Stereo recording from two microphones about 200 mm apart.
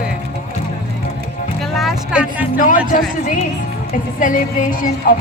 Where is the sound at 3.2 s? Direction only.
40° left (ahead or behind).